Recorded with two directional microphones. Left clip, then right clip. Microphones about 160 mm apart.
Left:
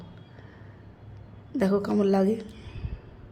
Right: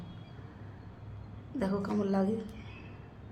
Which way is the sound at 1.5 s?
45° left (ahead or behind).